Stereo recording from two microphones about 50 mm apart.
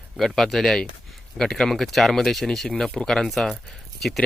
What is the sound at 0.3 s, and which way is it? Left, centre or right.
Speech, centre.